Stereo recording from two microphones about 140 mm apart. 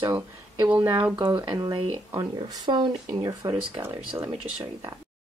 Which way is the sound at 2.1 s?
25° right (ahead or behind).